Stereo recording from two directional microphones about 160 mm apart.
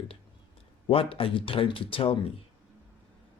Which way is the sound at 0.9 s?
35° left (ahead or behind).